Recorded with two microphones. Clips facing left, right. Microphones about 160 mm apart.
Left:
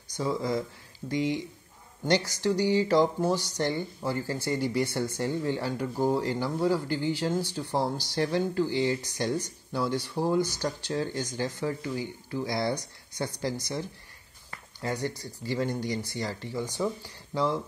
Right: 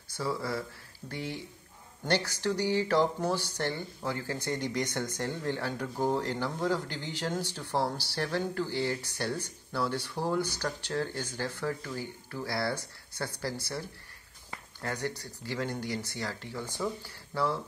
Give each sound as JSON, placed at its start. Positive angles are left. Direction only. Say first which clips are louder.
{"t": 0.1, "sound": "speech", "louder": "left 4 dB", "side_deg": 15}